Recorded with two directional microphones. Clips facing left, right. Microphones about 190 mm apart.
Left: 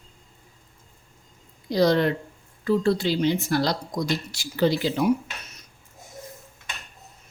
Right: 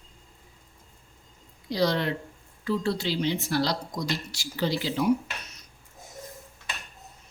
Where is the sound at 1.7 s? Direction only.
45° left (ahead or behind).